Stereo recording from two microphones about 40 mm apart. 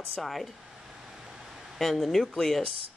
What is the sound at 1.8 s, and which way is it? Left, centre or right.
Speech, centre.